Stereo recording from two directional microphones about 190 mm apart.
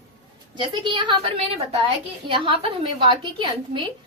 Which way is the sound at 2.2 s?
25° right (ahead or behind).